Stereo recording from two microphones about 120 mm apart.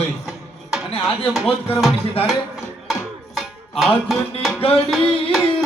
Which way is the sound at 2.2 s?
55° left (ahead or behind).